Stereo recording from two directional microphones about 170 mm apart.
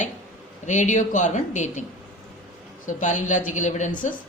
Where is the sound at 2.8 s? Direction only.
50° left (ahead or behind).